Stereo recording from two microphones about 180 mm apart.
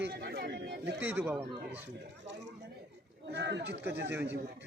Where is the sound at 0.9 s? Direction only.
10° right (ahead or behind).